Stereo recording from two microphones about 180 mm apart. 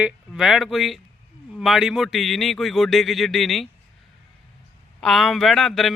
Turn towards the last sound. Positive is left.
turn(degrees=0)  # may be behind; listen again after turning